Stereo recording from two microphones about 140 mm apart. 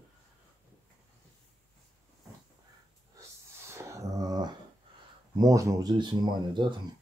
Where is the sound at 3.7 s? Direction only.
20° right (ahead or behind).